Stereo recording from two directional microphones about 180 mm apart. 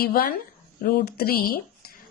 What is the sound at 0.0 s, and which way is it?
A woman's voice, 55° left (ahead or behind).